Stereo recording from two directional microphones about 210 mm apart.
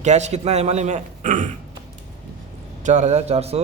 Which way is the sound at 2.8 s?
35° right (ahead or behind).